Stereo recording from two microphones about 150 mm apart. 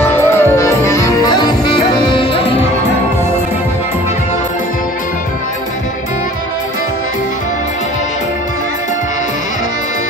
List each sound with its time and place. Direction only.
0.0 s music: 15° left (ahead or behind); by 2.5 s 30° left (ahead or behind)